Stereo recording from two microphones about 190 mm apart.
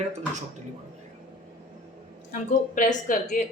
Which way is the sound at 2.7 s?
45° left (ahead or behind).